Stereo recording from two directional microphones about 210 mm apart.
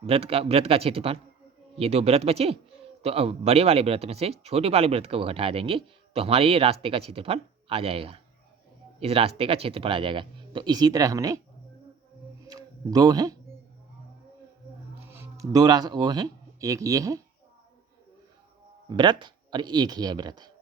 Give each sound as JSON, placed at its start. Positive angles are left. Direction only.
{"t": 0.0, "sound": "speech", "side_deg": -30}
{"t": 12.5, "sound": "a sound", "side_deg": -20}
{"t": 15.1, "sound": "speech", "side_deg": -15}
{"t": 18.9, "sound": "speech", "side_deg": -20}